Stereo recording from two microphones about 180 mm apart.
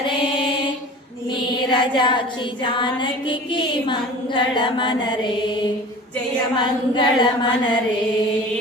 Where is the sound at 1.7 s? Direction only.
25° left (ahead or behind).